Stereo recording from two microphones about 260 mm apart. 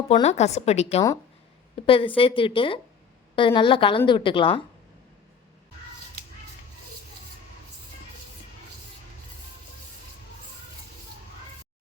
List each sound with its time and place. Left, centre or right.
0.1 s a woman's voice: left